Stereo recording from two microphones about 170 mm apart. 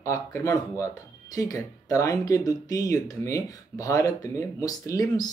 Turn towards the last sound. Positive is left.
turn(degrees=20)  # may be behind; listen again after turning